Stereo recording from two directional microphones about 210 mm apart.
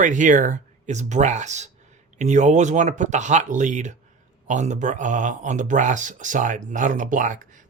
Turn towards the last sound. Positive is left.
turn(degrees=-40)  # may be behind; listen again after turning